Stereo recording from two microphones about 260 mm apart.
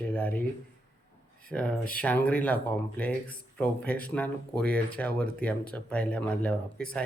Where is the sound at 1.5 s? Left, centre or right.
Centre.